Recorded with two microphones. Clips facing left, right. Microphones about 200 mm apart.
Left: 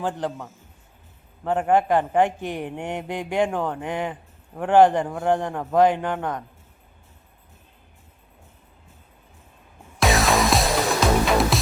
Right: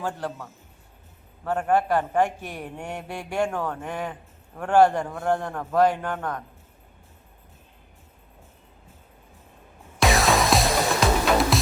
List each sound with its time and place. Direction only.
0.0 s a man's voice: 20° left (ahead or behind)
1.5 s a man's voice: 20° left (ahead or behind)
10.0 s music: centre (ahead or behind)